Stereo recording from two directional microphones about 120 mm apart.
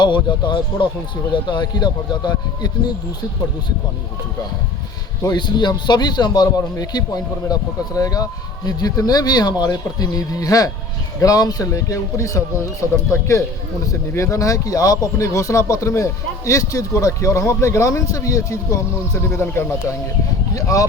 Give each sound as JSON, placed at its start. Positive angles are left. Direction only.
{"t": 0.0, "sound": "a man's voice", "side_deg": 40}
{"t": 5.2, "sound": "a man's voice", "side_deg": 35}